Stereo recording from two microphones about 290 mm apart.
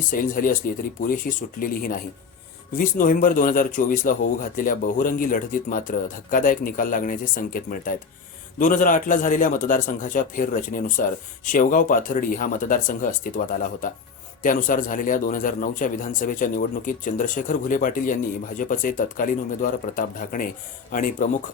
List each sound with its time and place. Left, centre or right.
0.1 s a man's voice: left